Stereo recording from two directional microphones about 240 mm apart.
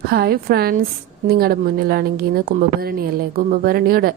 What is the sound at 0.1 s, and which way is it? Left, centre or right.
Speech, right.